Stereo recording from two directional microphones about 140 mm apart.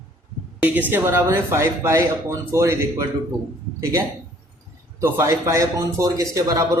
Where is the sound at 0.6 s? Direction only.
10° right (ahead or behind).